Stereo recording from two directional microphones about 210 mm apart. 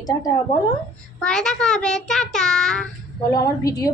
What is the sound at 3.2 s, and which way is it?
Speech, 15° left (ahead or behind).